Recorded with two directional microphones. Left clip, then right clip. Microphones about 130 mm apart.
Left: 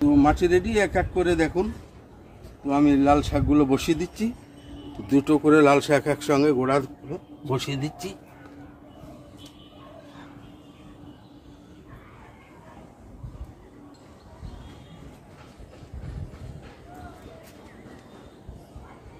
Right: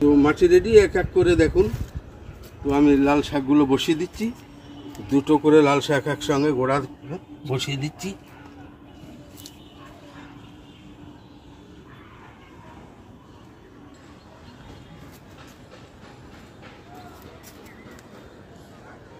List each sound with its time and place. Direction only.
0.2 s speech: 35° left (ahead or behind)
2.7 s speech: 35° left (ahead or behind)
5.1 s speech: 55° left (ahead or behind)
7.5 s speech: 35° left (ahead or behind)